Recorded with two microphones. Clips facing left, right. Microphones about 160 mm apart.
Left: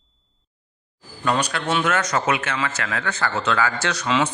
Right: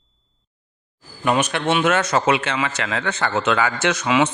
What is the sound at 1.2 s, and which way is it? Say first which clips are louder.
Speech: right 3 dB; 20° right (ahead or behind).